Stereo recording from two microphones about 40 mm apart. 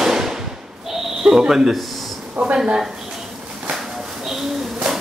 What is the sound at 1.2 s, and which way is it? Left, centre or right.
Speech, centre.